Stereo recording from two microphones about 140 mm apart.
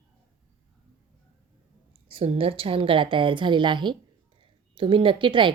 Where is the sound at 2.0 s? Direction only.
40° right (ahead or behind).